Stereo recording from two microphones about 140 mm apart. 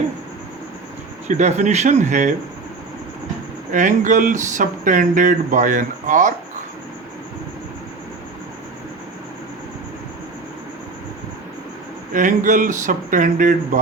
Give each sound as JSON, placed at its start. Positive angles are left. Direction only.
{"t": 1.3, "sound": "speech", "side_deg": -55}
{"t": 3.7, "sound": "speech", "side_deg": -65}
{"t": 12.1, "sound": "speech", "side_deg": -65}